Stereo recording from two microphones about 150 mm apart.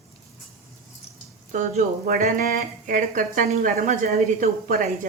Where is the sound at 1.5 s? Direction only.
60° right (ahead or behind).